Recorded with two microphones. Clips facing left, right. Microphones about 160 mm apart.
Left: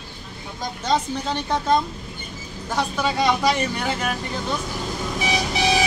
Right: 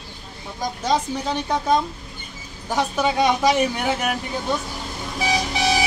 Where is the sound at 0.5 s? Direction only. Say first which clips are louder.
Right 1 dB; 10° right (ahead or behind).